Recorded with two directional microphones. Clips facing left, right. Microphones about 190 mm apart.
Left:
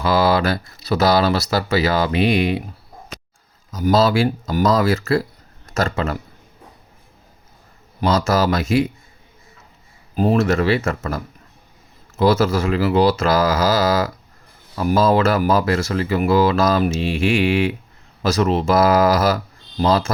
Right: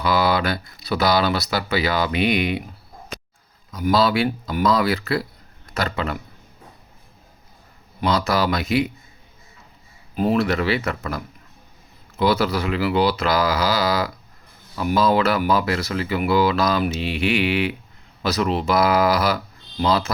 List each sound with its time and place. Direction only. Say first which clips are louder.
0.1 s a sound: left 3 dB; 35° left (ahead or behind)
1.2 s speech: left 3 dB; 35° left (ahead or behind)
3.8 s speech: left 3 dB; 40° left (ahead or behind)
4.2 s speech: left 3 dB; 30° left (ahead or behind)
4.6 s speech: left 2 dB; 45° left (ahead or behind)
8.0 s speech: left 3 dB; 45° left (ahead or behind)
10.2 s speech: left 3 dB; 40° left (ahead or behind)